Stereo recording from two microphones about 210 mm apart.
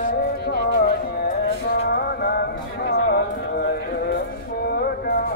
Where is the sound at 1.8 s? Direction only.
50° left (ahead or behind).